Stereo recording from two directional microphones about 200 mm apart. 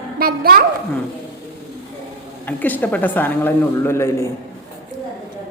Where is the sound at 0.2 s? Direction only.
50° right (ahead or behind).